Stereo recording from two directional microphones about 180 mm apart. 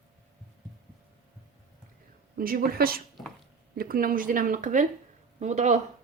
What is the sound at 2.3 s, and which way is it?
A woman's voice, 55° right (ahead or behind).